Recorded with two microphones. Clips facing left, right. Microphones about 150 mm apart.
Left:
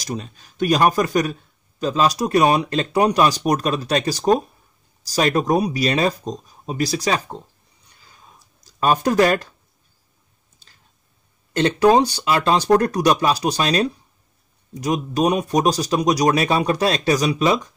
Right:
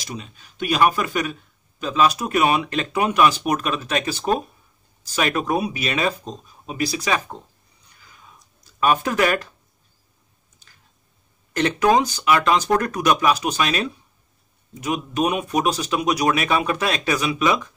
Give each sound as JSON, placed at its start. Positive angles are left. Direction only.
{"t": 0.0, "sound": "speech", "side_deg": 40}
{"t": 8.0, "sound": "a sound", "side_deg": 35}
{"t": 11.5, "sound": "speech", "side_deg": 30}